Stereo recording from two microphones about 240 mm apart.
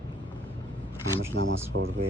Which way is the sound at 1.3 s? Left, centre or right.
Right.